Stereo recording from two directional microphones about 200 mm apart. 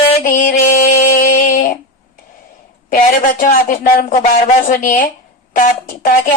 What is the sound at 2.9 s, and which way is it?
Speech, 45° left (ahead or behind).